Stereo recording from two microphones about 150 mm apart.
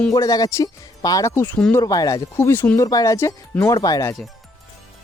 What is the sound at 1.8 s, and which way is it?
Speech, 25° left (ahead or behind).